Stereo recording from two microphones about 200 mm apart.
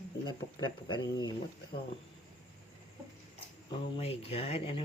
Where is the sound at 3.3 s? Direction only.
30° left (ahead or behind).